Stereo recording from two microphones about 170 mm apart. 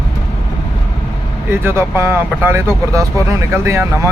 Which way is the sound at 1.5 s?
15° right (ahead or behind).